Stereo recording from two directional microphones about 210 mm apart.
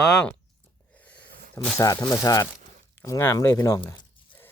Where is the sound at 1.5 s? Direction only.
15° left (ahead or behind).